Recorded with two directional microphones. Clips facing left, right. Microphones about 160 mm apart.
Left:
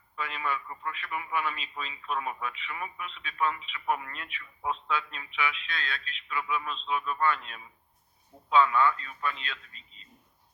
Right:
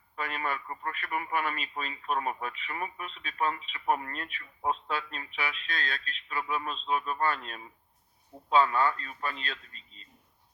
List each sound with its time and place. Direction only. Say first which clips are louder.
0.2 s a man's voice: even; 45° right (ahead or behind)